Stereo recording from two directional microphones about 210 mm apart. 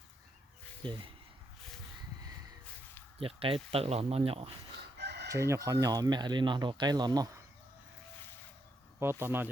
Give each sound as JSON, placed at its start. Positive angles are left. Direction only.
{"t": 0.8, "sound": "speech", "side_deg": -25}
{"t": 3.2, "sound": "speech", "side_deg": -25}
{"t": 4.9, "sound": "chicken", "side_deg": -55}
{"t": 5.3, "sound": "speech", "side_deg": -15}
{"t": 9.0, "sound": "speech", "side_deg": -10}